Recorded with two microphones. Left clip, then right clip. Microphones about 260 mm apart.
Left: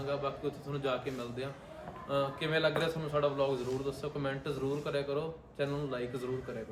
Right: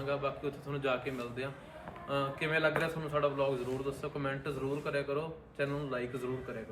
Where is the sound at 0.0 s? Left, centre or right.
Centre.